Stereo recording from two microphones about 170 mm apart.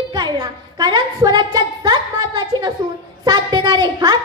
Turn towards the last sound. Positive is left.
turn(degrees=-25)  # may be behind; listen again after turning